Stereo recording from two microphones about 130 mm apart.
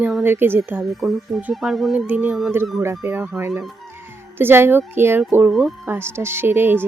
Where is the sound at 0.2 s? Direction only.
15° right (ahead or behind).